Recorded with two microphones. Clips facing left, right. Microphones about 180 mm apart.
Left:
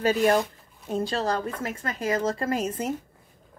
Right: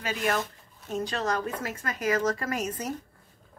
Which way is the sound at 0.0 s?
35° left (ahead or behind).